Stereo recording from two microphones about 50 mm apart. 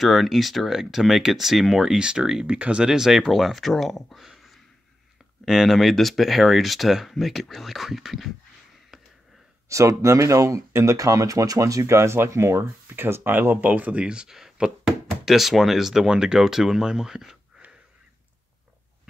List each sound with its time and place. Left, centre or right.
0.0 s speech: centre
2.0 s speech: centre
2.4 s speech: right
2.9 s speech: centre
4.3 s a sound: centre
5.4 s speech: centre
9.7 s speech: right
12.5 s speech: right
13.9 s speech: centre